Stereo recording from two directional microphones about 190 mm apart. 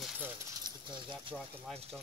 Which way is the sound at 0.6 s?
25° right (ahead or behind).